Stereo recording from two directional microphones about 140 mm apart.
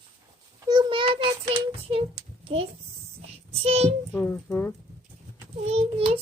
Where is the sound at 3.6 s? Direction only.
45° right (ahead or behind).